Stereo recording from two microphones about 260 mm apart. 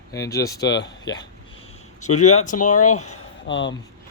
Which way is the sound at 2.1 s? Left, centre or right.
Left.